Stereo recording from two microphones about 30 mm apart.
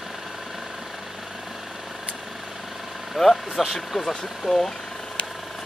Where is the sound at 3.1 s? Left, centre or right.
Centre.